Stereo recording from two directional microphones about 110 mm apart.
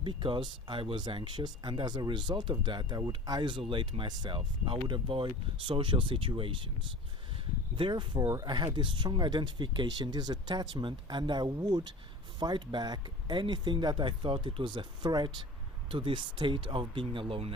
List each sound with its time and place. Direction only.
0.0 s speech: 45° right (ahead or behind)
7.8 s speech: 45° right (ahead or behind)